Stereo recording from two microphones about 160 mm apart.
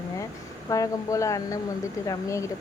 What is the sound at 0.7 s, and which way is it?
Speech, 20° left (ahead or behind).